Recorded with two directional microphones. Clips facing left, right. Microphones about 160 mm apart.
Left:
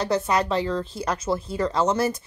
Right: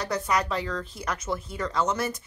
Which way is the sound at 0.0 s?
30° left (ahead or behind).